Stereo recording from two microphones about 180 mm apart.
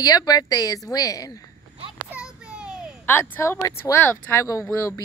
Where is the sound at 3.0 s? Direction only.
10° left (ahead or behind).